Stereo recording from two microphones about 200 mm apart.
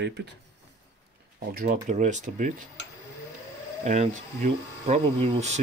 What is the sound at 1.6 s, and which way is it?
Speech, 40° right (ahead or behind).